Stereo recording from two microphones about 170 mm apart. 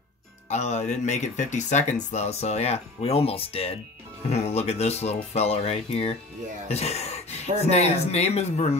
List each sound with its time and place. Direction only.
0.5 s speech: 40° left (ahead or behind)